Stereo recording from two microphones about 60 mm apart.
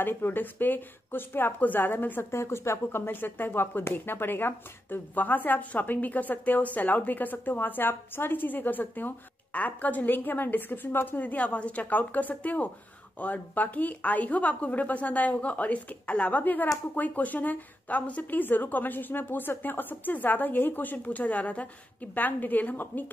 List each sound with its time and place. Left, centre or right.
0.0 s speech: left
2.3 s speech: left